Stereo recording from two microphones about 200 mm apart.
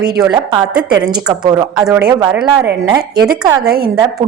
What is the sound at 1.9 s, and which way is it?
Speech, 5° right (ahead or behind).